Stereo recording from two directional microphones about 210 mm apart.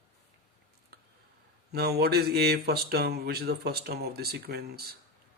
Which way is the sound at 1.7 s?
50° right (ahead or behind).